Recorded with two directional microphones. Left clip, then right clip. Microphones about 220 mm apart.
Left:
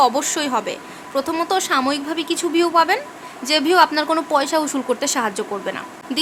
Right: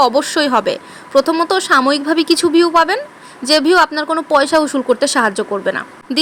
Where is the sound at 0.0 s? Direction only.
25° right (ahead or behind).